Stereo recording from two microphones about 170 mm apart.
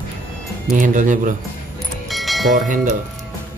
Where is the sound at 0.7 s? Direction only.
50° right (ahead or behind).